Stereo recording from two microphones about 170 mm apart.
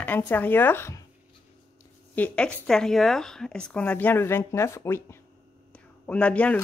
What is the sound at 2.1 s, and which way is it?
Speech, 5° left (ahead or behind).